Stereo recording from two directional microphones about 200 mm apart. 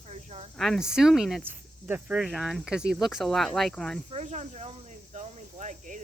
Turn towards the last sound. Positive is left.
turn(degrees=-40)  # may be behind; listen again after turning